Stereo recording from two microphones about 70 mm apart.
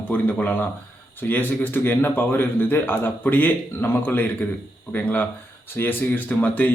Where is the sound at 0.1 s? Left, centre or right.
Left.